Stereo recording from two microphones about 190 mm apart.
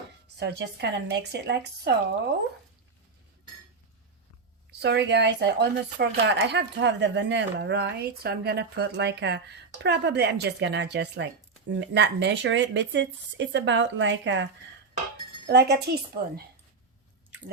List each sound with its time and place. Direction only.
0.3 s speech: 60° right (ahead or behind)
4.8 s speech: 65° right (ahead or behind)
15.4 s speech: 60° right (ahead or behind)